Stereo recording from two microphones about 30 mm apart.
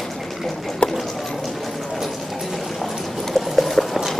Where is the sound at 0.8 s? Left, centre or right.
Left.